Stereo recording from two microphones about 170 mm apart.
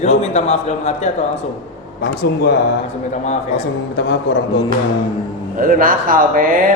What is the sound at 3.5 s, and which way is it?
Speech, 90° left.